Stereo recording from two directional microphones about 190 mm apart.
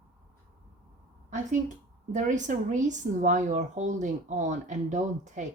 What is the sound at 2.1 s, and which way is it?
Speech, 40° right (ahead or behind).